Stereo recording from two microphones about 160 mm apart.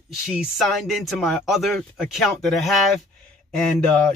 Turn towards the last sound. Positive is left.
turn(degrees=5)  # may be behind; listen again after turning